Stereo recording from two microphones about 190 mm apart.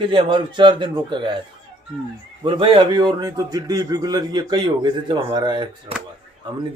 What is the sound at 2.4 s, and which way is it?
A man's voice, 25° right (ahead or behind).